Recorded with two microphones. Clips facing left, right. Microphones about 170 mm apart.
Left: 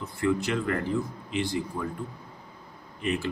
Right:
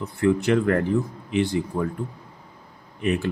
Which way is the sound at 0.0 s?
65° right (ahead or behind).